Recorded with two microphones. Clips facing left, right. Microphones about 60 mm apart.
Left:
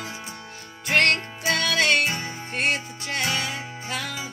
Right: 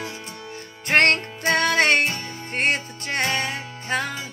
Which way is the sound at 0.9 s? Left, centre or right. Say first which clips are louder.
Right 3 dB; right.